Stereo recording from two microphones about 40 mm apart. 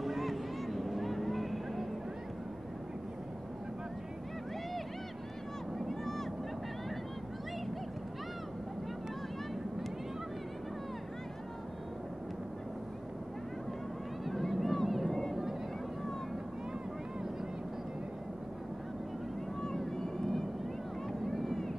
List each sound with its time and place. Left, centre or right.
0.0 s vehicle: centre
5.8 s boat: centre
14.5 s boat: centre
20.0 s vehicle: centre